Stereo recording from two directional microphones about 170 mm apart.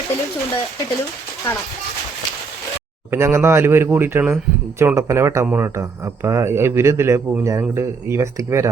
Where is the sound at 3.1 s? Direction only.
15° right (ahead or behind).